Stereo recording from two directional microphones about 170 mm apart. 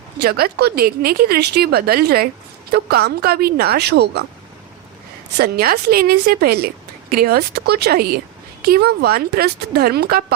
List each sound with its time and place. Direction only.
0.2 s a woman's voice: 65° right (ahead or behind)
5.4 s a woman's voice: 65° right (ahead or behind)